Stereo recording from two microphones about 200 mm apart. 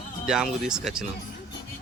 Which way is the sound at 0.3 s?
Centre (ahead or behind).